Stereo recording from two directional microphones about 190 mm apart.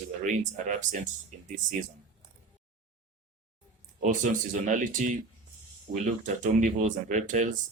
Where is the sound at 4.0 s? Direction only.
45° right (ahead or behind).